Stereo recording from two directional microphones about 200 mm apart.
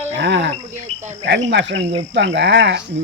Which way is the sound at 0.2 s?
60° right (ahead or behind).